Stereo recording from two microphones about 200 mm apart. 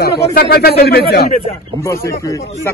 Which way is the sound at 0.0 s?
50° left (ahead or behind).